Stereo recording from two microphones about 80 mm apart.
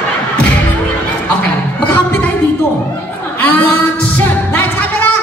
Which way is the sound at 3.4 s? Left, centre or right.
Left.